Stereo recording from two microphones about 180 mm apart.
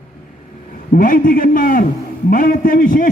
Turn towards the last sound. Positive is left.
turn(degrees=50)  # may be behind; listen again after turning